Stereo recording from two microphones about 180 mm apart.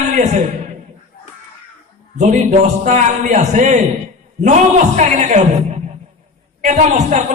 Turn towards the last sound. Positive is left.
turn(degrees=-40)  # may be behind; listen again after turning